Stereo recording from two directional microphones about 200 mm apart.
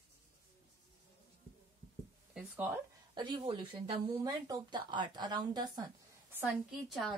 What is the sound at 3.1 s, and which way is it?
Speech, 20° right (ahead or behind).